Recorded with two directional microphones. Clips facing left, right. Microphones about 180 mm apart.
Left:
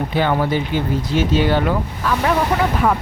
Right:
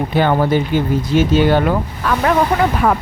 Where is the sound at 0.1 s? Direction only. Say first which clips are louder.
Right 4 dB; 50° right (ahead or behind).